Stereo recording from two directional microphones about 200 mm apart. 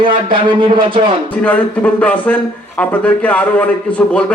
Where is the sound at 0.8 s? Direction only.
25° right (ahead or behind).